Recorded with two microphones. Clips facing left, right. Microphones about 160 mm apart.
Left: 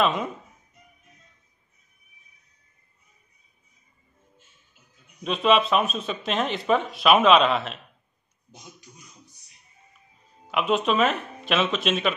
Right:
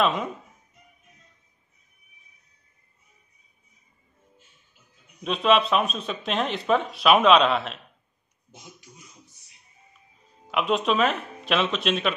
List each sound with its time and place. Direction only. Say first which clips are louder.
0.0 s speech: even; centre (ahead or behind)
5.2 s speech: even; centre (ahead or behind)
8.5 s speech: even; 20° right (ahead or behind)
10.5 s speech: left 1 dB; centre (ahead or behind)